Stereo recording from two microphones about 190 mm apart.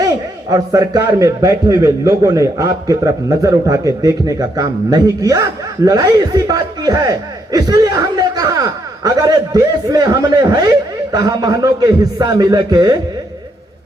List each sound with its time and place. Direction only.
0.5 s a man's voice: 20° right (ahead or behind)